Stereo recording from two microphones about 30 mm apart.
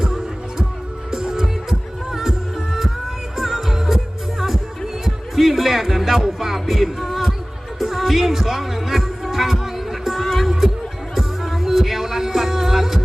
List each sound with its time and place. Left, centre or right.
1.1 s music: centre
3.3 s music: centre
10.2 s music: centre
11.1 s music: centre